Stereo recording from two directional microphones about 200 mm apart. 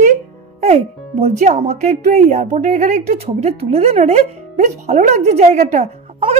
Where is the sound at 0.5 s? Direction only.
30° right (ahead or behind).